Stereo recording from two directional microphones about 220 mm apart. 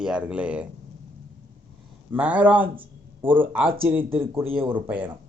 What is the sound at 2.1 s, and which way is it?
A man's voice, 5° right (ahead or behind).